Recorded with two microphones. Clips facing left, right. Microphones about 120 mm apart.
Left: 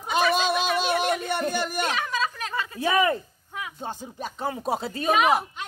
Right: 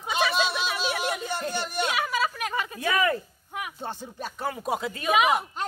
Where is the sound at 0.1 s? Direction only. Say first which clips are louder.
Left 3 dB; 45° left (ahead or behind).